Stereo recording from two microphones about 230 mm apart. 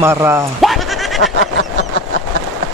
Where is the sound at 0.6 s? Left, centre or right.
Centre.